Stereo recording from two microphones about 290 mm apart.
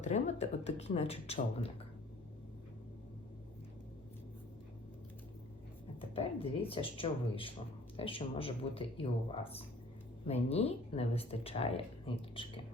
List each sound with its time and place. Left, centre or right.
0.0 s speech: left
6.0 s speech: centre